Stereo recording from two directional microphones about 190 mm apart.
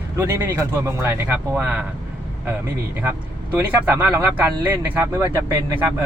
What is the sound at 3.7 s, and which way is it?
Speech, 10° right (ahead or behind).